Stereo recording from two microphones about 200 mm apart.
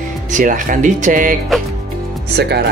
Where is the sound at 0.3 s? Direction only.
40° right (ahead or behind).